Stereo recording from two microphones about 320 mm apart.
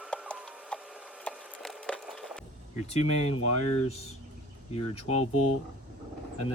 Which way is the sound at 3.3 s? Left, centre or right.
Left.